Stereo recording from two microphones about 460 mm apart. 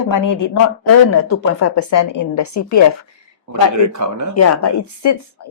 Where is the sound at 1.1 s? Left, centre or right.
Left.